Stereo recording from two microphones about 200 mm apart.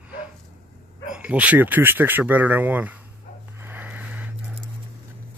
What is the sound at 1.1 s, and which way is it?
Speech, 5° right (ahead or behind).